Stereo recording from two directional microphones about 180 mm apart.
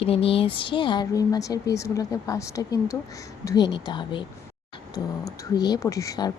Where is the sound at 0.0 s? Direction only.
30° left (ahead or behind).